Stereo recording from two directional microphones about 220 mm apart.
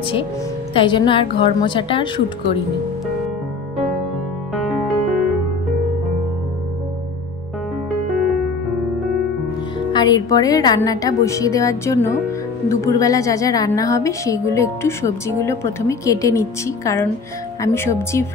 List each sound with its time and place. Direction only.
0.7 s speech: 20° left (ahead or behind)
9.9 s a woman's voice: 20° left (ahead or behind)